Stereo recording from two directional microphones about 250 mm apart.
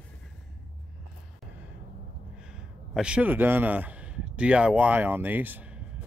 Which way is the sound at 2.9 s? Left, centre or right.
Centre.